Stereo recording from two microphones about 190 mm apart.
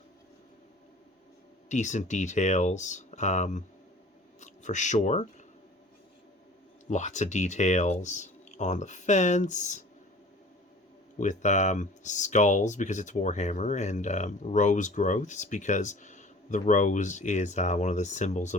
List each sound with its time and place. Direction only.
1.7 s speech: 40° left (ahead or behind)
6.9 s speech: 40° left (ahead or behind)
11.2 s speech: 40° left (ahead or behind)